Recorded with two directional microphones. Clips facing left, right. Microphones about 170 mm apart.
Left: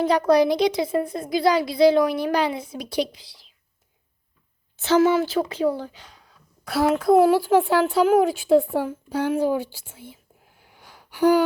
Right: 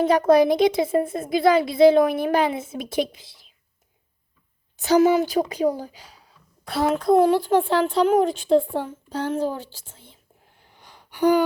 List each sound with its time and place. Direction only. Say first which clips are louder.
0.3 s a woman's voice: right 2 dB; 20° right (ahead or behind)
4.9 s a woman's voice: right 1 dB; 15° right (ahead or behind)
6.7 s a woman's voice: left 1 dB; 5° left (ahead or behind)
10.6 s a sound: left 1 dB; 5° left (ahead or behind)